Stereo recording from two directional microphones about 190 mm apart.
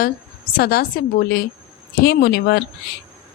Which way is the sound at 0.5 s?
50° left (ahead or behind).